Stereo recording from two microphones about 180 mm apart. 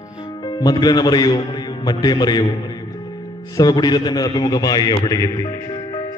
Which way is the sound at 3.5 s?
20° left (ahead or behind).